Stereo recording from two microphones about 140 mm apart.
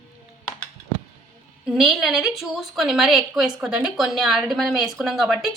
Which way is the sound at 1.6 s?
5° right (ahead or behind).